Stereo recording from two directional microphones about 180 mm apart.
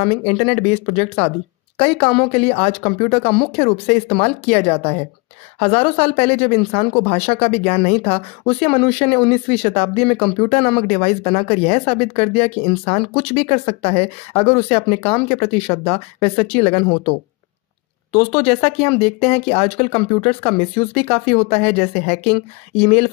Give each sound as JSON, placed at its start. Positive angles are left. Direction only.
{"t": 0.0, "sound": "speech", "side_deg": 35}
{"t": 18.1, "sound": "speech", "side_deg": 30}